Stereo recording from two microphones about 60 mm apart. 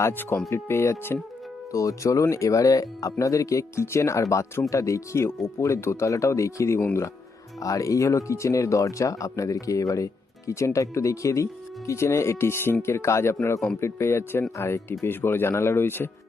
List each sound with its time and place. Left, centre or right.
0.1 s speech: left
0.5 s speech: left
1.7 s speech: left
7.6 s speech: left